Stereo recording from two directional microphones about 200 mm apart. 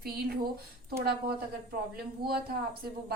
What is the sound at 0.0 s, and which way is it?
Speech, 50° right (ahead or behind).